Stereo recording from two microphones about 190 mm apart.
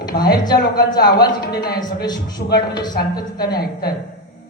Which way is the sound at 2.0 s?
20° left (ahead or behind).